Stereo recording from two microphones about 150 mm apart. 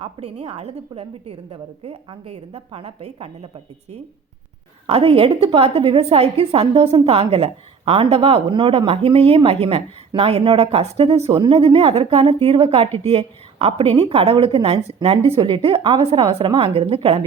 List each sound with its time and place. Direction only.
0.0 s a woman's voice: 45° right (ahead or behind)